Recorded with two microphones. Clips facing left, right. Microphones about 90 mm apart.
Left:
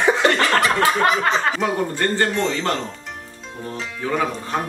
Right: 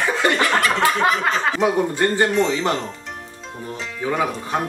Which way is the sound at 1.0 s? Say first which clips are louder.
Left 1 dB; 5° right (ahead or behind).